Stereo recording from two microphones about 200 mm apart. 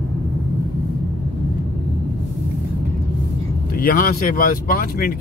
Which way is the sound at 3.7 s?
45° left (ahead or behind).